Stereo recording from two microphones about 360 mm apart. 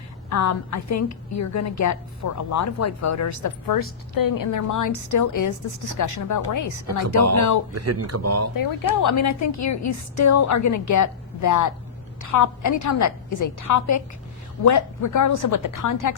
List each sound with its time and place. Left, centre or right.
0.3 s a woman's voice: left
7.7 s speech: right
8.5 s a woman's voice: left